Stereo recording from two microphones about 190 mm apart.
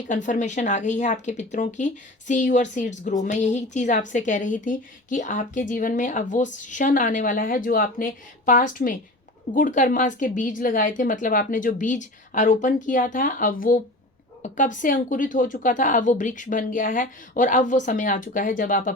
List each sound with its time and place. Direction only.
0.1 s a woman's voice: 40° left (ahead or behind)